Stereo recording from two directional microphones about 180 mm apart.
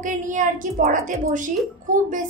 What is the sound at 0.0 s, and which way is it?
A woman's voice, 45° right (ahead or behind).